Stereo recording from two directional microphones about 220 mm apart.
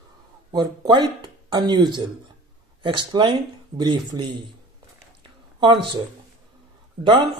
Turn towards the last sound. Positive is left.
turn(degrees=-20)  # may be behind; listen again after turning